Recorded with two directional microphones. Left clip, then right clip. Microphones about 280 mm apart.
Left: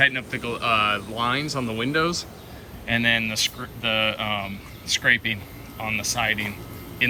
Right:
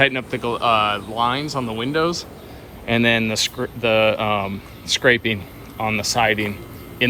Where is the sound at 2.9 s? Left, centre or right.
Centre.